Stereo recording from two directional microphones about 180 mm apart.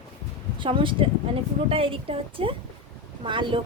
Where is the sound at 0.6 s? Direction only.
30° right (ahead or behind).